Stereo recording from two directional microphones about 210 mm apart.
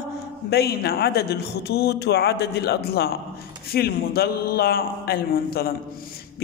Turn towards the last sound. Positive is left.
turn(degrees=45)  # may be behind; listen again after turning